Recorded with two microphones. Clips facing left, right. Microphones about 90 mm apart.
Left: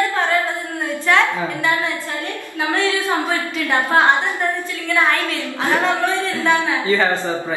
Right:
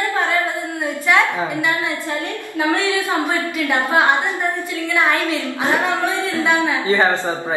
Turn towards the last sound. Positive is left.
turn(degrees=-20)  # may be behind; listen again after turning